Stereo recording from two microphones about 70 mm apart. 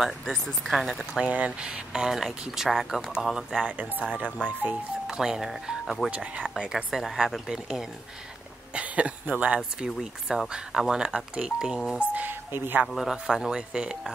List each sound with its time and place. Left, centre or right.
0.0 s speech: centre
1.2 s speech: centre
5.0 s speech: centre
6.0 s speech: centre
8.7 s speech: centre
9.8 s speech: centre; by 12.8 s right
12.8 s speech: centre